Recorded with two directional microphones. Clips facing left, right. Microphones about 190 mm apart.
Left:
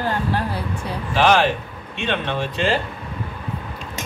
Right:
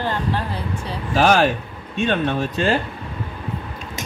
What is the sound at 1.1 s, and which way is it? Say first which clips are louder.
Speech: right 1 dB; 45° right (ahead or behind).